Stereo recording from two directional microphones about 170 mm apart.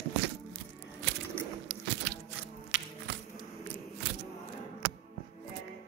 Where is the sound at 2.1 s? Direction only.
90° right.